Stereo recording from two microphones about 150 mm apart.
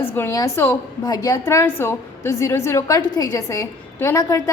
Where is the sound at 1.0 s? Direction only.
25° left (ahead or behind).